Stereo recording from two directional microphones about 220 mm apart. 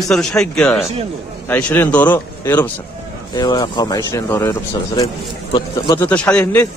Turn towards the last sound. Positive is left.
turn(degrees=5)  # may be behind; listen again after turning